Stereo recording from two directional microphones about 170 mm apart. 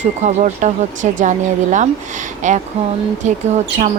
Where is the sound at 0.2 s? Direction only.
45° right (ahead or behind).